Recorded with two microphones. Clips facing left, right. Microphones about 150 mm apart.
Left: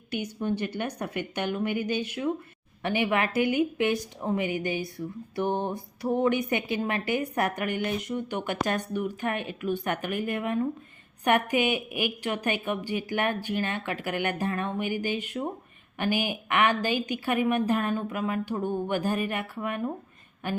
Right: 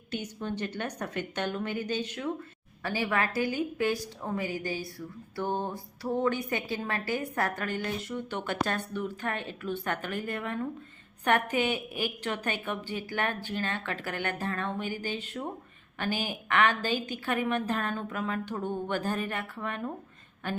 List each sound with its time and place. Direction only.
0.1 s a woman's voice: 10° left (ahead or behind)